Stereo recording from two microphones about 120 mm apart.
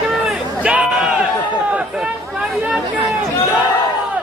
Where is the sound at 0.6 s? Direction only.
10° right (ahead or behind).